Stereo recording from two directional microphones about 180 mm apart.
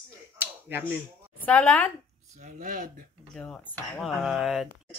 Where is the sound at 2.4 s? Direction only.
45° right (ahead or behind).